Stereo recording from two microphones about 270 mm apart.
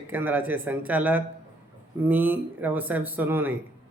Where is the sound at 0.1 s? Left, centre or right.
Centre.